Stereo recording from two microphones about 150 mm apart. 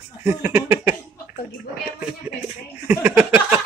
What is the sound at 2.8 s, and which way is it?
Speech, 15° right (ahead or behind).